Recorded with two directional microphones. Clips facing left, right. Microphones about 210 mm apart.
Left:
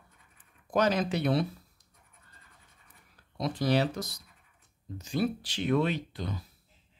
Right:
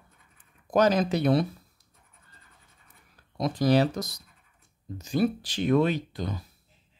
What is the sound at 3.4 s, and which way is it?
Speech, 45° right (ahead or behind).